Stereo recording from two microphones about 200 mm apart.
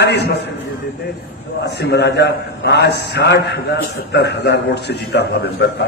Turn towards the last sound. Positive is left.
turn(degrees=55)  # may be behind; listen again after turning